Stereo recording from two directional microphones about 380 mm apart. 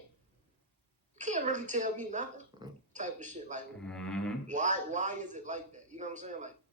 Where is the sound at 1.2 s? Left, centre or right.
Centre.